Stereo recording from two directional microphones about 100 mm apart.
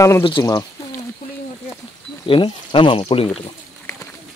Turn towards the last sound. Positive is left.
turn(degrees=70)  # may be behind; listen again after turning